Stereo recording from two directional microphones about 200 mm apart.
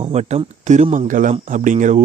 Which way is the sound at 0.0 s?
35° right (ahead or behind).